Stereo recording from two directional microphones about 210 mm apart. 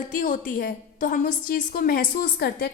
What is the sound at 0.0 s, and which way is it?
A woman's voice, 40° left (ahead or behind).